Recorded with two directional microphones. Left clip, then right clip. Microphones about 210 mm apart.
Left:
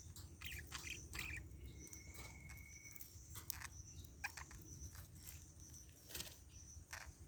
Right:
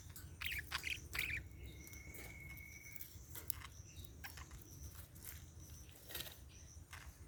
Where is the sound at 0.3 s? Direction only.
45° right (ahead or behind).